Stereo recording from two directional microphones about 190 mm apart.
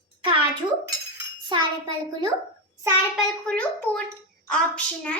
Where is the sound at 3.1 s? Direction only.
5° left (ahead or behind).